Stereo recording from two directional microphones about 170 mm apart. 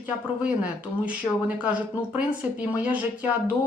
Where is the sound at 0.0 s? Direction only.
10° right (ahead or behind).